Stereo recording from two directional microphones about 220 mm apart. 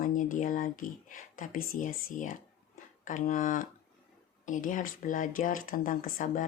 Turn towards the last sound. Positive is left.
turn(degrees=35)  # may be behind; listen again after turning